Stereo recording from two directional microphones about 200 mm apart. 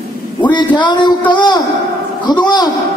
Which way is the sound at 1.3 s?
20° left (ahead or behind).